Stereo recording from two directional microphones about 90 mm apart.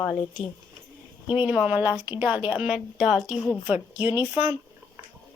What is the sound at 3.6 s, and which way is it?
Speech, 15° right (ahead or behind).